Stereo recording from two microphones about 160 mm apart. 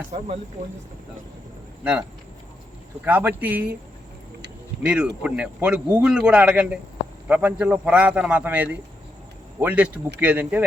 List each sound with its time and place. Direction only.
0.1 s speech: 35° right (ahead or behind)
1.8 s a man's voice: 15° right (ahead or behind)
5.2 s a man's voice: 5° right (ahead or behind)